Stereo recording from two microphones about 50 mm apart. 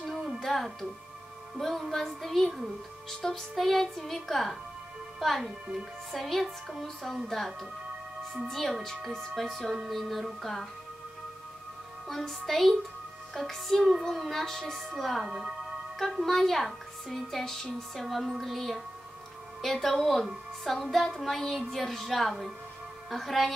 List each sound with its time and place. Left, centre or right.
0.0 s music: centre
12.1 s music: centre